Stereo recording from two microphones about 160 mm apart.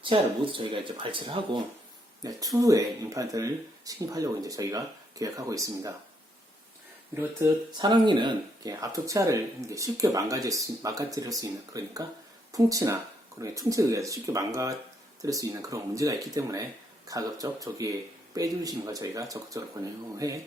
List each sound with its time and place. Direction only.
0.0 s speech: 30° right (ahead or behind)
2.2 s speech: 20° right (ahead or behind)
7.7 s speech: 25° right (ahead or behind)